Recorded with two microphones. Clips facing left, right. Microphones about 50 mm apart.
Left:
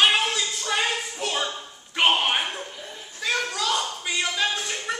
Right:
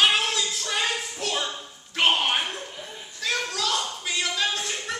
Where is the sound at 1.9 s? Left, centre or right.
Centre.